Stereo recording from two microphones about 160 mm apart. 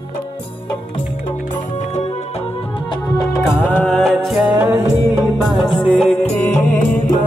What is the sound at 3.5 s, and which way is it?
Music, 10° left (ahead or behind).